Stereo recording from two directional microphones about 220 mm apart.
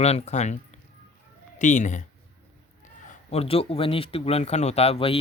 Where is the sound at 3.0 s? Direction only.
25° left (ahead or behind).